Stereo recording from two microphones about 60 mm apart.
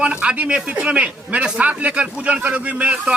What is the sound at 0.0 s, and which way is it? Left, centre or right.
A man's voice, centre.